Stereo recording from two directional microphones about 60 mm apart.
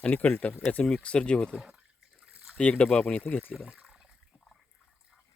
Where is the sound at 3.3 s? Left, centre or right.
Left.